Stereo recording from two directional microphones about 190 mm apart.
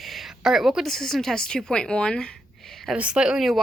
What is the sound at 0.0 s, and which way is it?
A woman's voice, centre (ahead or behind).